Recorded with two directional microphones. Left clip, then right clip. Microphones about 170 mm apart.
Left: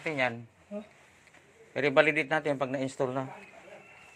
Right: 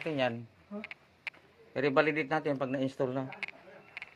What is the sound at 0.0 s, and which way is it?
Speech, 40° right (ahead or behind).